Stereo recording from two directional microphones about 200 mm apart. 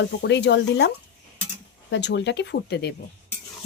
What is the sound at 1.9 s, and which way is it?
Speech, 60° left (ahead or behind).